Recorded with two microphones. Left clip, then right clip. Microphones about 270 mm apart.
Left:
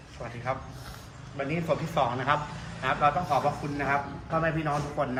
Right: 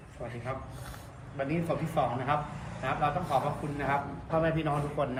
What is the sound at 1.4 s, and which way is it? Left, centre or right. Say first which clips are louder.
Speech: left 1 dB; centre.